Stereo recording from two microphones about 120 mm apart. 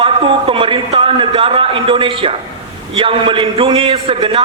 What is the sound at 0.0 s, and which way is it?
A man's voice, 45° right (ahead or behind).